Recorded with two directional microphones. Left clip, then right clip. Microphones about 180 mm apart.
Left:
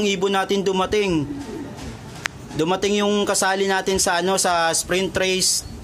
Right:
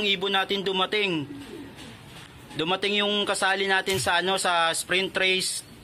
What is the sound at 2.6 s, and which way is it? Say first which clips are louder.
Speech: left 4 dB; 5° left (ahead or behind).